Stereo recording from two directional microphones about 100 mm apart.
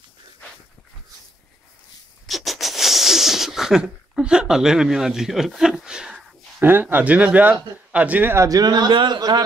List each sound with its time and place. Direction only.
2.2 s wheeze: centre (ahead or behind)
6.6 s speech: 20° right (ahead or behind)
8.4 s a man's voice: 35° right (ahead or behind)